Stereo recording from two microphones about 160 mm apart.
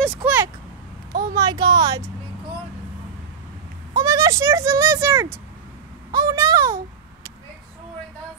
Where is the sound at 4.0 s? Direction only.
20° right (ahead or behind).